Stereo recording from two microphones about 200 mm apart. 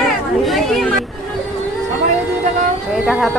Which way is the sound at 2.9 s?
Centre (ahead or behind).